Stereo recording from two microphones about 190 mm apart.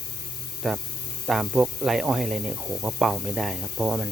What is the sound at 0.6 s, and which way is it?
Speech, centre (ahead or behind).